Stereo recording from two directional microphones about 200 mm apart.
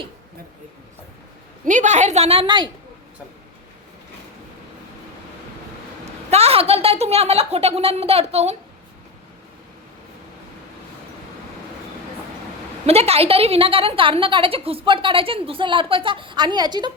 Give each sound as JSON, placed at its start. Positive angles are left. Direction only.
{"t": 1.6, "sound": "a woman's voice", "side_deg": -40}
{"t": 6.3, "sound": "a woman's voice", "side_deg": -30}
{"t": 12.8, "sound": "a woman's voice", "side_deg": -30}